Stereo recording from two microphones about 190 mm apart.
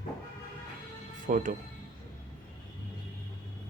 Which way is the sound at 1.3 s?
45° right (ahead or behind).